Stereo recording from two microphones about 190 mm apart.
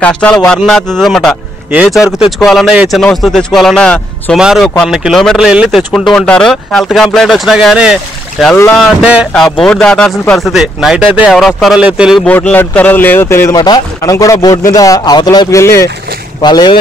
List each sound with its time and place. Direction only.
0.0 s speech: 5° left (ahead or behind)
6.1 s speech: 5° left (ahead or behind)
12.3 s speech: 10° left (ahead or behind)